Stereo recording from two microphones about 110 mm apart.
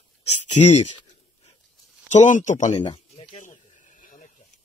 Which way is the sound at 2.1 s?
90° left.